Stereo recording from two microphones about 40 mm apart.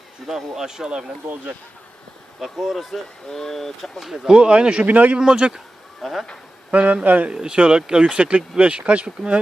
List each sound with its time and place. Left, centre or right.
0.3 s speech: centre
2.4 s speech: centre
3.2 s speech: centre
4.2 s speech: right
4.9 s speech: right
5.1 s speech: right
6.0 s speech: centre
6.7 s speech: right
7.3 s speech: right